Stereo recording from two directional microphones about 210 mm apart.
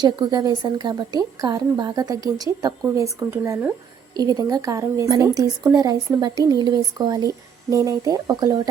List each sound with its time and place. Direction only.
0.0 s a woman's voice: 20° right (ahead or behind)